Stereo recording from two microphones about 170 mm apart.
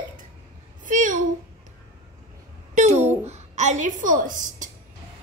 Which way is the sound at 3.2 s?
40° right (ahead or behind).